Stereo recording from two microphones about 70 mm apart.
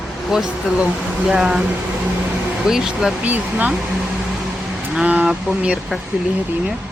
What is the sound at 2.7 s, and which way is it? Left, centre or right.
Speech, centre.